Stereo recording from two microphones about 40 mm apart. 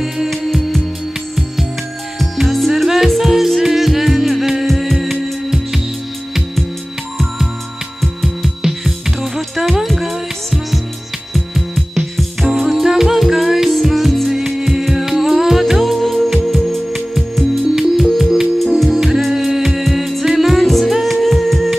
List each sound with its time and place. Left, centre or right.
0.0 s music: centre
2.1 s music: centre
8.0 s music: centre